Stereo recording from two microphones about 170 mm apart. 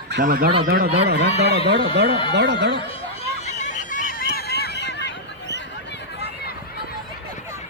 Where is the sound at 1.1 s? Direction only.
75° right (ahead or behind).